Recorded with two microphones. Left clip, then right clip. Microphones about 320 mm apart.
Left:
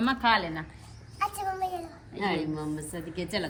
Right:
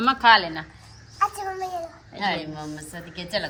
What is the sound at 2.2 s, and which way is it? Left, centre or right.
A woman's voice, right.